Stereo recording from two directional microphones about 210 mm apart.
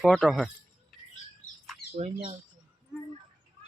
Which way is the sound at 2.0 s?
35° right (ahead or behind).